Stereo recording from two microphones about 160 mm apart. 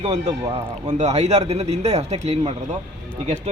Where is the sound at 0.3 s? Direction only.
25° right (ahead or behind).